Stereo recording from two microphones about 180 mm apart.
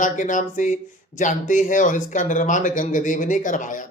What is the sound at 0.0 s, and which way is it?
Speech, 45° left (ahead or behind).